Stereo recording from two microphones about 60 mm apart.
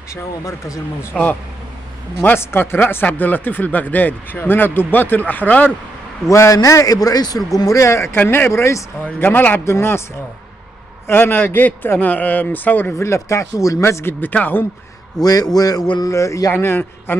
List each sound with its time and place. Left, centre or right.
0.1 s speech: left
1.1 s speech: centre
2.3 s speech: left
6.2 s a man's voice: left
7.5 s speech: left
8.2 s speech: left
8.5 s speech: left
9.2 s speech: left
11.1 s speech: left
13.0 s speech: left
14.3 s speech: left
15.1 s a man's voice: left
16.5 s speech: left